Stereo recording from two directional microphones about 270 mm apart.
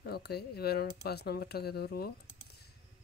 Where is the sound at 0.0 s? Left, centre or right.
Left.